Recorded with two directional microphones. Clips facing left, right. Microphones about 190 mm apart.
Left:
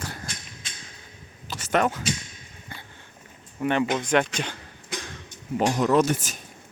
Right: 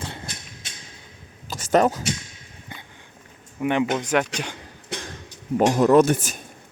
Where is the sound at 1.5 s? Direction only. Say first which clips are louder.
Right 5 dB; 45° right (ahead or behind).